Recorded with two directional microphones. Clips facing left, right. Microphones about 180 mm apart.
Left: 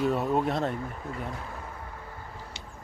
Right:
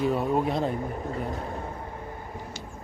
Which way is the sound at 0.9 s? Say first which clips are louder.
Right 5 dB; 35° right (ahead or behind).